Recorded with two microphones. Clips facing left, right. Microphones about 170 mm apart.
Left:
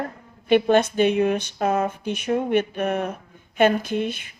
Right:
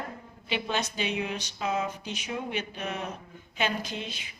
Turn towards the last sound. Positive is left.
turn(degrees=55)  # may be behind; listen again after turning